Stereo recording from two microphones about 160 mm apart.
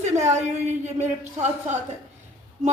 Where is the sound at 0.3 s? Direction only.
45° right (ahead or behind).